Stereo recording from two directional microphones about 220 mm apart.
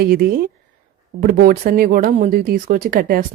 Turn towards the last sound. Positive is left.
turn(degrees=-40)  # may be behind; listen again after turning